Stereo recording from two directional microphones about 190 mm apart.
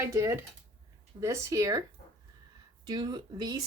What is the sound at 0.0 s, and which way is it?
Speech, 15° right (ahead or behind).